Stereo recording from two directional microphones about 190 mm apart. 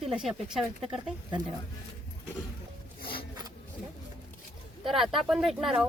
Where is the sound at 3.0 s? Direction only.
55° left (ahead or behind).